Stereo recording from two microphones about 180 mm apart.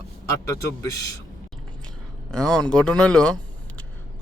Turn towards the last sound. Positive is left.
turn(degrees=5)  # may be behind; listen again after turning